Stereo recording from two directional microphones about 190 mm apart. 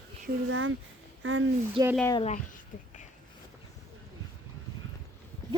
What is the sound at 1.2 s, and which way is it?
Speech, 90° right.